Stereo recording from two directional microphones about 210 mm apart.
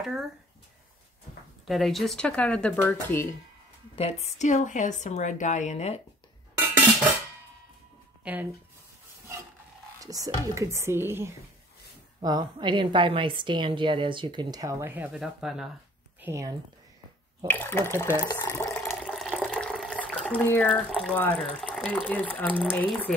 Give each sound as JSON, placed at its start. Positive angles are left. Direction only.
{"t": 0.0, "sound": "speech", "side_deg": 0}
{"t": 1.7, "sound": "speech", "side_deg": 0}
{"t": 3.9, "sound": "a woman's voice", "side_deg": 30}
{"t": 8.2, "sound": "speech", "side_deg": -10}
{"t": 9.9, "sound": "a woman's voice", "side_deg": -15}
{"t": 16.2, "sound": "a woman's voice", "side_deg": -15}
{"t": 17.5, "sound": "speech", "side_deg": 10}
{"t": 18.2, "sound": "water", "side_deg": 15}